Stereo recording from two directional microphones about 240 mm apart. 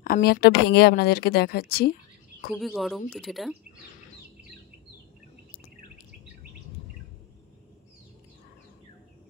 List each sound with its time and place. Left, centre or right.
0.0 s speech: left
2.5 s speech: centre